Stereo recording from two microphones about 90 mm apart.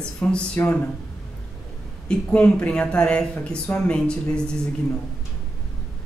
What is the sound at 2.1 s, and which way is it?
Speech, 10° left (ahead or behind).